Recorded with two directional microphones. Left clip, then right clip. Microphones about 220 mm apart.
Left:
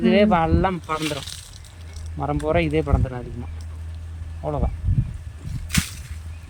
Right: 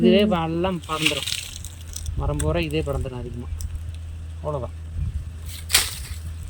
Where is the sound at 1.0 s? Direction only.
45° right (ahead or behind).